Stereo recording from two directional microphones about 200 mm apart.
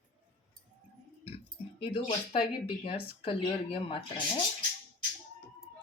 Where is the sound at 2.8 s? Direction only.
25° left (ahead or behind).